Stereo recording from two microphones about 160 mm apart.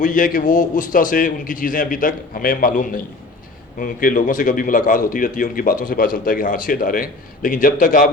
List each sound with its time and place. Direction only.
0.0 s a man's voice: 55° left (ahead or behind)